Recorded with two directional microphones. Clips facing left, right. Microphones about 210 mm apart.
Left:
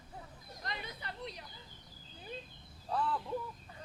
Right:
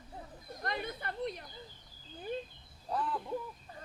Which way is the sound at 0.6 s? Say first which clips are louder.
Right 6 dB; 55° right (ahead or behind).